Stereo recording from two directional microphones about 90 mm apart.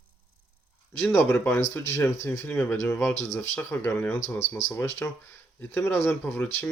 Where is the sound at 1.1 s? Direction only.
25° left (ahead or behind).